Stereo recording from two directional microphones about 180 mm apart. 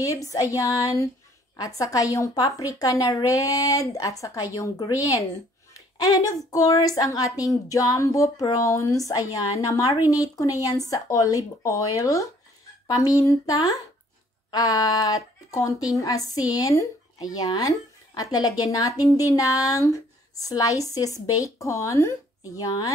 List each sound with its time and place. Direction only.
0.0 s speech: 15° left (ahead or behind)